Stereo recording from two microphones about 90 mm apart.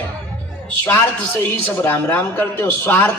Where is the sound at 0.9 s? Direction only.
20° left (ahead or behind).